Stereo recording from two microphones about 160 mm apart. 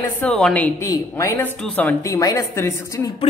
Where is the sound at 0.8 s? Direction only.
20° left (ahead or behind).